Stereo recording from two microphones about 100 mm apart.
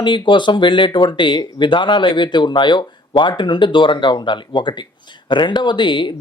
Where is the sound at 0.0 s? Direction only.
50° left (ahead or behind).